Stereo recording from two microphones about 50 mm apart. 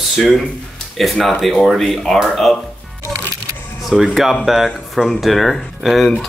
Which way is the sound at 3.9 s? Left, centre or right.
Centre.